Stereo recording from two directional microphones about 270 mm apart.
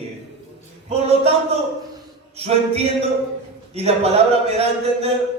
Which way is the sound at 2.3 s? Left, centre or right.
Right.